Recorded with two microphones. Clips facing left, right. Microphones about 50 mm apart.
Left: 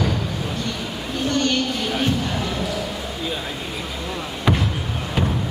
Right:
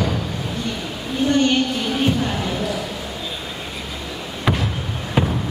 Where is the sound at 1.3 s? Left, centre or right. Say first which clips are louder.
Right 4 dB; centre.